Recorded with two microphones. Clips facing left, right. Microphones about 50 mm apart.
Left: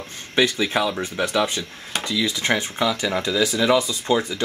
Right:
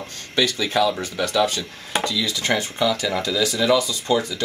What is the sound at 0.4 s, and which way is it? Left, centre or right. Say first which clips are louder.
Speech: even; left.